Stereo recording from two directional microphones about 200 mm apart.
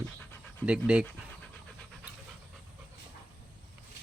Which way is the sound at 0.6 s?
5° right (ahead or behind).